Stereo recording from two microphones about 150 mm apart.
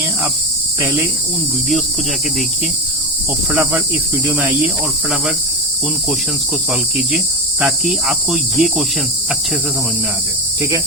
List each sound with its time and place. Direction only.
0.8 s cricket: 15° right (ahead or behind)
3.5 s cricket: 10° right (ahead or behind)
7.6 s cricket: 5° right (ahead or behind)